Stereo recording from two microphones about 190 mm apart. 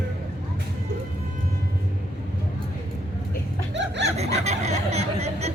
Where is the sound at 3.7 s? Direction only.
70° right (ahead or behind).